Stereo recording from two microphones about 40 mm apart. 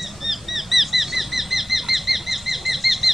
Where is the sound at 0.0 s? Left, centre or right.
Centre.